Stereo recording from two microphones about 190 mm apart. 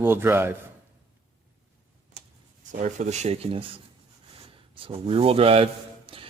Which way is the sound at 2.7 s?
40° right (ahead or behind).